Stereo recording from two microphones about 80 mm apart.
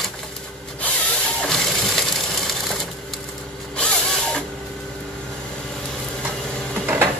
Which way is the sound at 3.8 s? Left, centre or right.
Centre.